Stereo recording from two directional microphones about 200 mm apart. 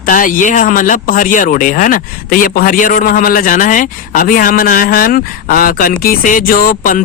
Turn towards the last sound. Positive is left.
turn(degrees=40)  # may be behind; listen again after turning